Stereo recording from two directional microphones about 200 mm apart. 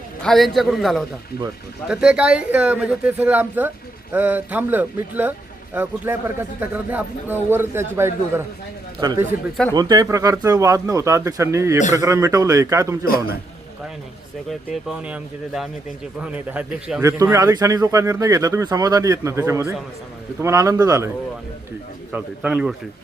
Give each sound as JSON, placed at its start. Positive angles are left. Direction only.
{"t": 0.2, "sound": "a man's voice", "side_deg": 0}
{"t": 14.7, "sound": "a man's voice", "side_deg": -5}
{"t": 22.1, "sound": "a man's voice", "side_deg": -5}